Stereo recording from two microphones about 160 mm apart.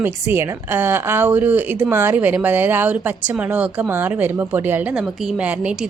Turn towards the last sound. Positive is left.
turn(degrees=-5)  # may be behind; listen again after turning